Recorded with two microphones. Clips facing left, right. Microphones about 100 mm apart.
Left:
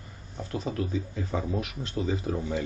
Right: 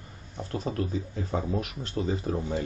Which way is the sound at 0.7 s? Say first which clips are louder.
Even; 40° right (ahead or behind).